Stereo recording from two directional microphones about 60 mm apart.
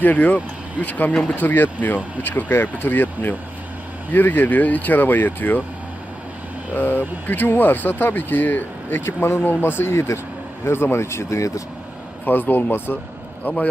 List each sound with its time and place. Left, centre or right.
0.0 s speech: left
1.1 s speech: centre
1.4 s speech: left
6.7 s speech: left
12.2 s speech: left